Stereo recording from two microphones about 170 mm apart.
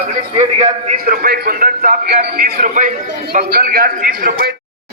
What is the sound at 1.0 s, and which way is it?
A man's voice, 60° right (ahead or behind).